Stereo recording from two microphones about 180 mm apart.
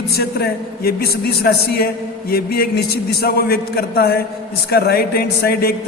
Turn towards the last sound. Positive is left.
turn(degrees=60)  # may be behind; listen again after turning